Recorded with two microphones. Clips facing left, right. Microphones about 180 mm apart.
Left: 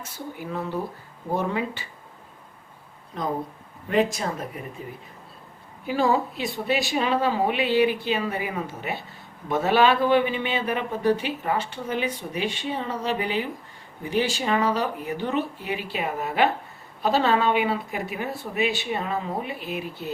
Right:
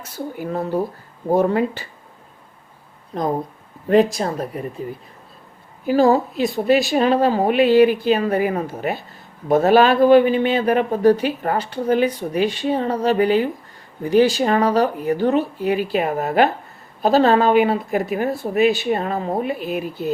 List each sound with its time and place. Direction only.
0.3 s speech: 45° right (ahead or behind)
3.1 s speech: 40° right (ahead or behind)
5.8 s a man's voice: 40° right (ahead or behind)